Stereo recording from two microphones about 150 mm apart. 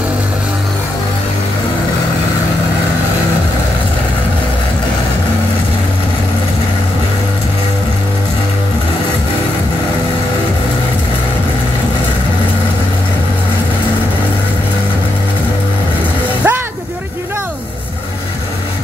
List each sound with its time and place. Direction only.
16.4 s vehicle: 15° right (ahead or behind)